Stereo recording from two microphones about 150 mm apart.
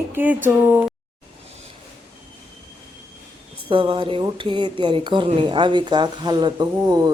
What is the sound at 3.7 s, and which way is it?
Speech, 35° right (ahead or behind).